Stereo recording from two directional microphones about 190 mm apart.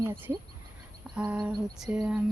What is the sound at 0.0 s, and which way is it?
Speech, 10° right (ahead or behind).